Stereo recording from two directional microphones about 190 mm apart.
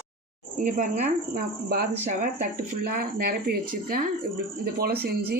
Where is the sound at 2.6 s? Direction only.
55° right (ahead or behind).